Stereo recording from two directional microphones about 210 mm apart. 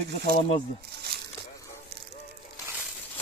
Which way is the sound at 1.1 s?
50° right (ahead or behind).